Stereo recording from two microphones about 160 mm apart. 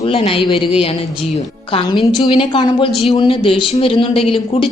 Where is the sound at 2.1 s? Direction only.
30° left (ahead or behind).